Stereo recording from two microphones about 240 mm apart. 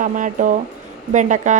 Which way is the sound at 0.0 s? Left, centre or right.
Right.